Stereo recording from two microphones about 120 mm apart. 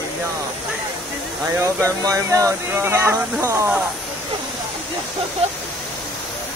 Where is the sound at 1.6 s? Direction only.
25° right (ahead or behind).